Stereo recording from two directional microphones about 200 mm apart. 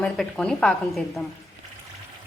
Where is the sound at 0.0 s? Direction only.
5° left (ahead or behind).